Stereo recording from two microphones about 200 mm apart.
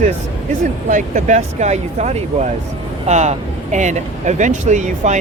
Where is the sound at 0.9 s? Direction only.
40° right (ahead or behind).